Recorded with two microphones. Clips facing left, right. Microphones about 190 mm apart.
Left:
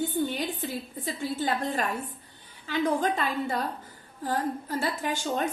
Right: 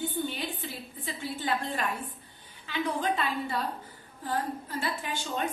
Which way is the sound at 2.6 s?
45° left (ahead or behind).